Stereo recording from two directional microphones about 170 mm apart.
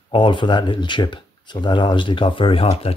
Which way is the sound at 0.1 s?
30° left (ahead or behind).